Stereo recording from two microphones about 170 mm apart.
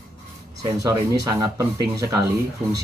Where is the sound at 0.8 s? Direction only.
20° right (ahead or behind).